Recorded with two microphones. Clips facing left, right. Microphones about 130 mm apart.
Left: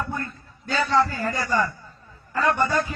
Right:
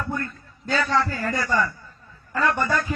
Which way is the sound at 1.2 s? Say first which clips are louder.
Even; 30° left (ahead or behind).